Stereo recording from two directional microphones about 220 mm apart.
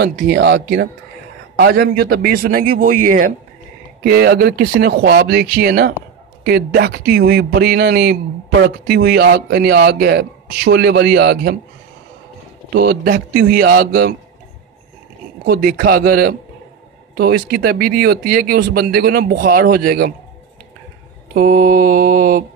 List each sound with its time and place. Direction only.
0.0 s a man's voice: 50° right (ahead or behind)
12.7 s speech: 45° right (ahead or behind)
15.4 s speech: 45° right (ahead or behind)
21.3 s a man's voice: 40° right (ahead or behind)